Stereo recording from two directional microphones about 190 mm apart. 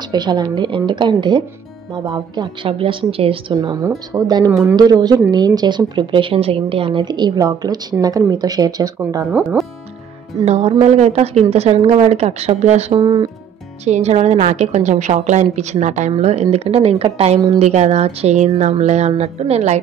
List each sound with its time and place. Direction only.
0.1 s speech: 20° right (ahead or behind)
3.5 s speech: 15° right (ahead or behind)
9.3 s speech: 5° right (ahead or behind)
10.4 s a woman's voice: 35° right (ahead or behind)
13.0 s speech: 20° right (ahead or behind)
13.8 s a woman's voice: 35° right (ahead or behind)